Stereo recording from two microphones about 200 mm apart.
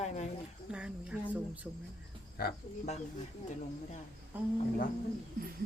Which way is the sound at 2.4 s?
50° left (ahead or behind).